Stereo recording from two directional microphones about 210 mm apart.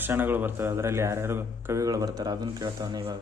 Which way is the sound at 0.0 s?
10° right (ahead or behind).